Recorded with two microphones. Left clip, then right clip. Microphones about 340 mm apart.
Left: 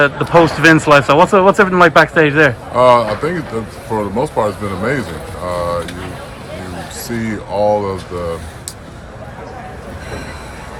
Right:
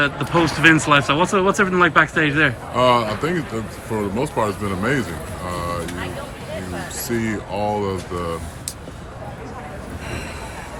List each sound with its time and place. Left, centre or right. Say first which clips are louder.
0.0 s speech: left 8 dB; centre
5.5 s vehicle: left 8 dB; centre
7.1 s speech: left 3 dB; centre